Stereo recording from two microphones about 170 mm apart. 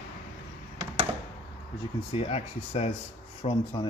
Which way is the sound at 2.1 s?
35° left (ahead or behind).